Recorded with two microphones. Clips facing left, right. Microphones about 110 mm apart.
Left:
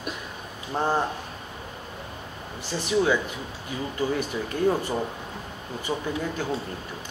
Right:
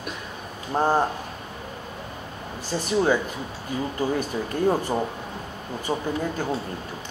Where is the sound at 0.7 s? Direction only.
40° right (ahead or behind).